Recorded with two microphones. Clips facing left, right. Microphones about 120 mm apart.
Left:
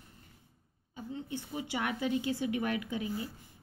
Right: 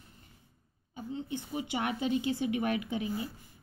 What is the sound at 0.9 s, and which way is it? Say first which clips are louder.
A woman's voice: right 2 dB; 20° right (ahead or behind).